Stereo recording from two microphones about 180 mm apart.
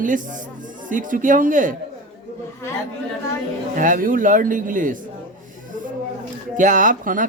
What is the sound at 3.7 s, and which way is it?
Speech, 45° right (ahead or behind).